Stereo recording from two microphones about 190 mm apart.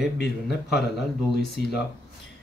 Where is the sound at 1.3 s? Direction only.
60° left (ahead or behind).